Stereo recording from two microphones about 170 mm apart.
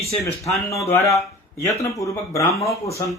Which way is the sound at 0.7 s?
20° left (ahead or behind).